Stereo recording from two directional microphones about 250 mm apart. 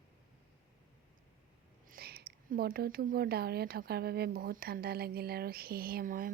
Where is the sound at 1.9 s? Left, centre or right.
Right.